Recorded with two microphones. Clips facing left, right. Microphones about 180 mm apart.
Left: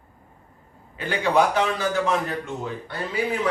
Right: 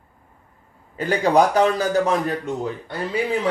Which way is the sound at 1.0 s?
40° right (ahead or behind).